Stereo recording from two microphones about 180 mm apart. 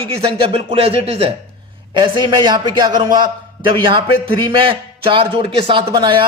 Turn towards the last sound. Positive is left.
turn(degrees=-25)  # may be behind; listen again after turning